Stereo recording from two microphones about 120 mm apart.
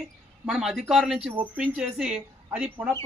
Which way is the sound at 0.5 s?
5° right (ahead or behind).